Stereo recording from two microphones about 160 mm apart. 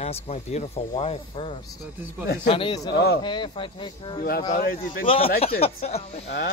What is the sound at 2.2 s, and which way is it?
Speech, 80° left.